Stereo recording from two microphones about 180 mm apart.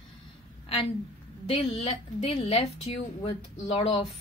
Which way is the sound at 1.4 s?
30° left (ahead or behind).